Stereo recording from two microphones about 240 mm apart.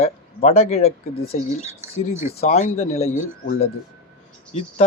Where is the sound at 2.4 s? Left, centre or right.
Left.